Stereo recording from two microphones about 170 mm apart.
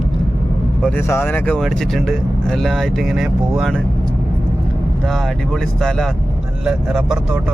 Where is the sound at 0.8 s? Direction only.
15° left (ahead or behind).